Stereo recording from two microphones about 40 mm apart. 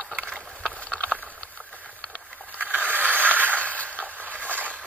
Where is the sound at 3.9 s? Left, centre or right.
Right.